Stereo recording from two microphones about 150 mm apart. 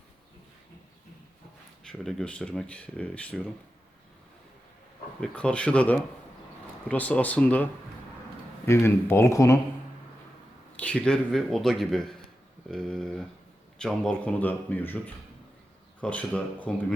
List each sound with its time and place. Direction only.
1.8 s speech: 5° left (ahead or behind)
5.2 s speech: 10° left (ahead or behind)
10.8 s speech: 5° left (ahead or behind)